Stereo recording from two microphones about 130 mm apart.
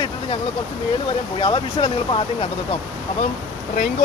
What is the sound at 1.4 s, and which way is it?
Speech, 40° left (ahead or behind).